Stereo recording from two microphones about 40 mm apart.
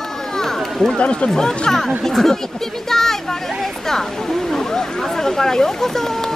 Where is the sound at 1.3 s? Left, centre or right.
Centre.